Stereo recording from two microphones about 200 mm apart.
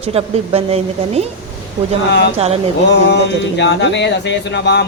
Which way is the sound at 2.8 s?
60° left (ahead or behind).